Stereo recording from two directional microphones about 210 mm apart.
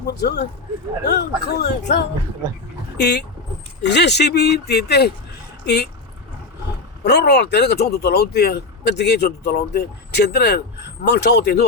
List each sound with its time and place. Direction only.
0.2 s speech: 50° left (ahead or behind)
7.0 s speech: 50° left (ahead or behind)